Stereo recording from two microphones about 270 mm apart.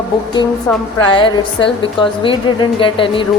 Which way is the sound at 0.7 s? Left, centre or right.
Centre.